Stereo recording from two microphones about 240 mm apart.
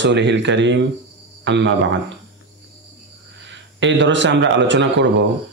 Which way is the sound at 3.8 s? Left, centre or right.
Right.